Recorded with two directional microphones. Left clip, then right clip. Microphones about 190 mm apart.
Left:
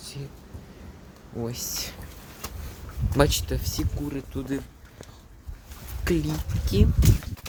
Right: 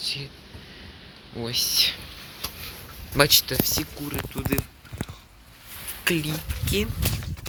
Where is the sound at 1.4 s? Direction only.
20° left (ahead or behind).